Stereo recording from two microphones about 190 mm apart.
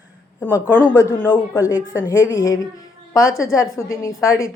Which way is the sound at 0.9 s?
15° left (ahead or behind).